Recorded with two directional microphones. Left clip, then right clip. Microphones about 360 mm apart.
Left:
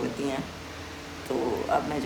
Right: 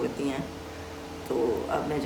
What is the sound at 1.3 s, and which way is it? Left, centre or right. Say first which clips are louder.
Speech: left 1 dB; centre.